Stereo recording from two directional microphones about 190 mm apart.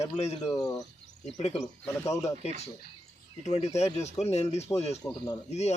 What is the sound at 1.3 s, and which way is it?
Speech, 35° left (ahead or behind).